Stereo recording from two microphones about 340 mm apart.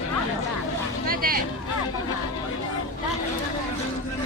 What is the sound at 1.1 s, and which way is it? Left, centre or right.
Vehicle, right.